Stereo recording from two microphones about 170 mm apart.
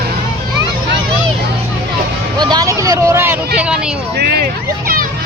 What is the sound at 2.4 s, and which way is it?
Vehicle, 25° right (ahead or behind).